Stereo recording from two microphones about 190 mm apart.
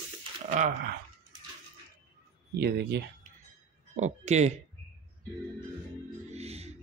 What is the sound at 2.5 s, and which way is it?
Speech, 60° right (ahead or behind).